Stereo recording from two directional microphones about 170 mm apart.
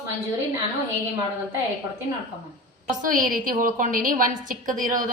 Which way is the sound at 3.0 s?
55° right (ahead or behind).